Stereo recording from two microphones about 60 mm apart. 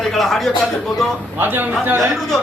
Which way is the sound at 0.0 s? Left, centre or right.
Centre.